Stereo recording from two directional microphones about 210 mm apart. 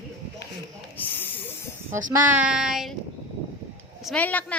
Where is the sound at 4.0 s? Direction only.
5° left (ahead or behind).